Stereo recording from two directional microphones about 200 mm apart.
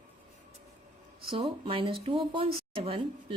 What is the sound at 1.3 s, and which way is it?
Speech, 25° right (ahead or behind).